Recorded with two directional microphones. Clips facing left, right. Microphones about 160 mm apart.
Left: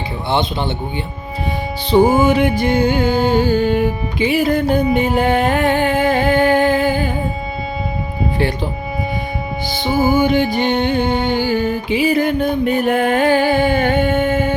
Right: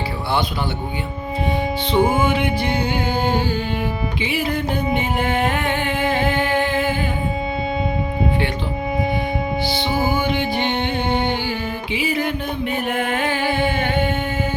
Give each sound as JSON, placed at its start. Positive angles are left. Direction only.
{"t": 1.9, "sound": "music", "side_deg": 40}
{"t": 9.7, "sound": "music", "side_deg": 45}